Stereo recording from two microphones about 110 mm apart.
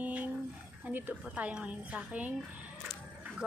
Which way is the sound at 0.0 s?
15° right (ahead or behind).